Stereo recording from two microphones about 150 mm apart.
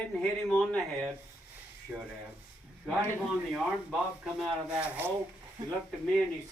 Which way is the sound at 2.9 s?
Centre (ahead or behind).